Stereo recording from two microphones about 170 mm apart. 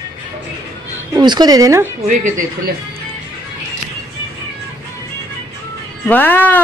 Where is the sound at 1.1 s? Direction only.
25° right (ahead or behind).